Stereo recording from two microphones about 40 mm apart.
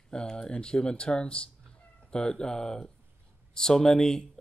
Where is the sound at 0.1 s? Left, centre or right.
Left.